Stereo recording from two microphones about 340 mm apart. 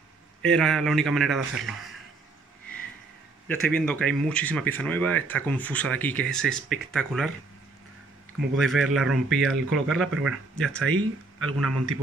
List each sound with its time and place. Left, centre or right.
0.4 s speech: centre
3.4 s speech: centre
8.5 s speech: centre
11.6 s a man's voice: right